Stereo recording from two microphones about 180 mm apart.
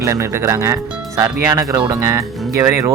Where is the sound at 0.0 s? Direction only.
15° right (ahead or behind).